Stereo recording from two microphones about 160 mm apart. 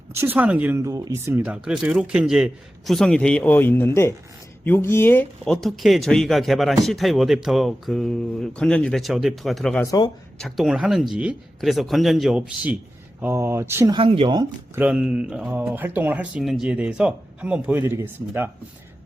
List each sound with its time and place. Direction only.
0.1 s a man's voice: 15° right (ahead or behind); by 5.5 s 10° left (ahead or behind)
5.5 s a man's voice: centre (ahead or behind)
9.8 s speech: 20° left (ahead or behind)
10.3 s a man's voice: centre (ahead or behind)
13.2 s speech: 15° right (ahead or behind)
13.9 s speech: 35° right (ahead or behind)
14.8 s speech: 5° right (ahead or behind)